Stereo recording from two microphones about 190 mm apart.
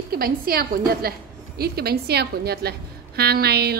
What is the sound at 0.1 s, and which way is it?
A woman's voice, 50° right (ahead or behind).